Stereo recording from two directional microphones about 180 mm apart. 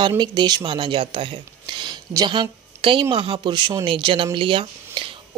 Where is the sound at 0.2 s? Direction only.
25° right (ahead or behind).